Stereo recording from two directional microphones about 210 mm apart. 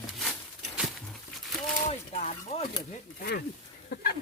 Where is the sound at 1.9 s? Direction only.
35° left (ahead or behind).